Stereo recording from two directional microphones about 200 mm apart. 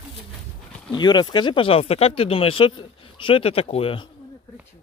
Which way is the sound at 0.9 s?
20° left (ahead or behind).